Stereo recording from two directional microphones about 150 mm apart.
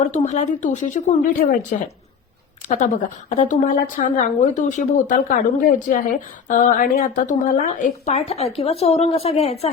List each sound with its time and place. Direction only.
0.1 s a woman's voice: 50° left (ahead or behind)